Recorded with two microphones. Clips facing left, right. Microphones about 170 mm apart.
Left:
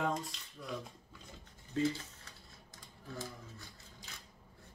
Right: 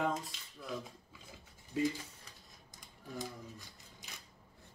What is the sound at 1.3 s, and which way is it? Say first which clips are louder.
Mechanisms: even; 10° right (ahead or behind).